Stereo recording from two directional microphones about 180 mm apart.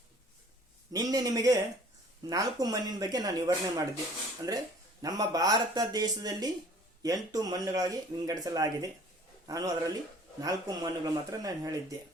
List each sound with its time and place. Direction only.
0.9 s a man's voice: 20° right (ahead or behind)